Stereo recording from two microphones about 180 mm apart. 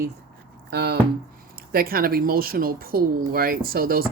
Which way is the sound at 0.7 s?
60° right (ahead or behind).